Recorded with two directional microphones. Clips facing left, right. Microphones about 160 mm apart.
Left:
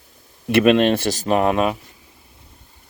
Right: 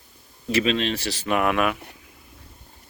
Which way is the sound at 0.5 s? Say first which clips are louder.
Left 8 dB; 60° left (ahead or behind).